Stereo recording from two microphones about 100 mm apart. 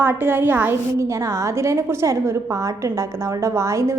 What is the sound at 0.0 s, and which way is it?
A woman's voice, 20° right (ahead or behind).